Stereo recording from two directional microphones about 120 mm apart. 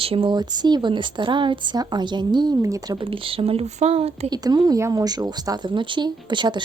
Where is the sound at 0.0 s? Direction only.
50° right (ahead or behind).